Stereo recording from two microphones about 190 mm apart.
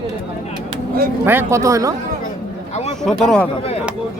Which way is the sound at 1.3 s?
10° right (ahead or behind).